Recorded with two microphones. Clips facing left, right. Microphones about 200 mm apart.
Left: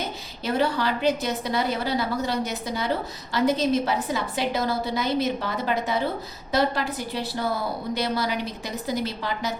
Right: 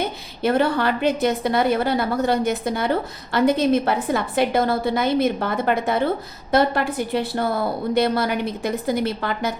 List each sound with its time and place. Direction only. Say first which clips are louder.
0.0 s a woman's voice: right 8 dB; 55° right (ahead or behind)